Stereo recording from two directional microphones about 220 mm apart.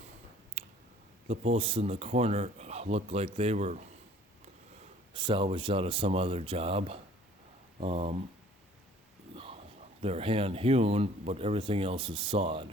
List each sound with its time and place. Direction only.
0.6 s a sound: 30° right (ahead or behind)
1.3 s speech: 25° right (ahead or behind)
5.1 s speech: 20° right (ahead or behind)
9.3 s speech: 25° right (ahead or behind)